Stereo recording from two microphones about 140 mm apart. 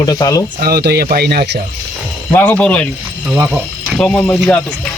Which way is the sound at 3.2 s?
10° right (ahead or behind).